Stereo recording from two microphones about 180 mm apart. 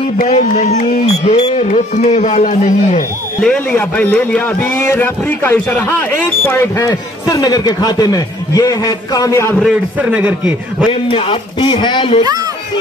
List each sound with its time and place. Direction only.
0.2 s speech: 45° left (ahead or behind)
3.4 s speech: 10° left (ahead or behind)
9.6 s a man's voice: 5° right (ahead or behind)
10.9 s a man's voice: 30° left (ahead or behind)